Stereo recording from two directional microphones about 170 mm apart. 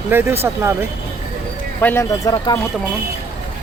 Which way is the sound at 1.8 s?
15° left (ahead or behind).